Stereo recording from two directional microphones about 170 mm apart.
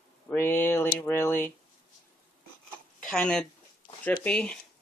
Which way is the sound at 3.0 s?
5° left (ahead or behind).